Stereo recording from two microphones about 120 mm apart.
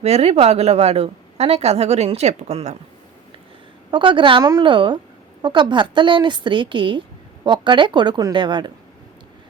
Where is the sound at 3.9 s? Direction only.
45° right (ahead or behind).